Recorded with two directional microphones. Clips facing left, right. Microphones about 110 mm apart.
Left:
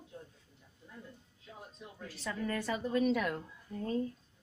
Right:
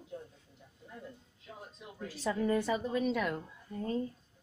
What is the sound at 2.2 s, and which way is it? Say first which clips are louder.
Speech: right 5 dB; 15° right (ahead or behind).